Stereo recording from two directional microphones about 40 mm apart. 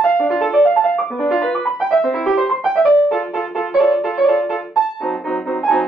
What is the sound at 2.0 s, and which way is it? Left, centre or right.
Music, centre.